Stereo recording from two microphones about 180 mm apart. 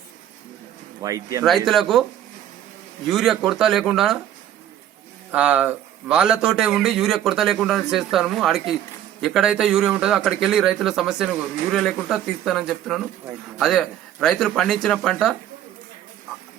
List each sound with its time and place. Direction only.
1.0 s speech: 20° right (ahead or behind)
1.5 s speech: centre (ahead or behind)
3.1 s speech: centre (ahead or behind)
5.3 s speech: 10° right (ahead or behind)